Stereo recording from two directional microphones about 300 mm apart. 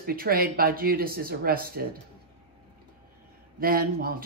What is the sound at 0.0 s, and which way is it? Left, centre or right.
Speech, right.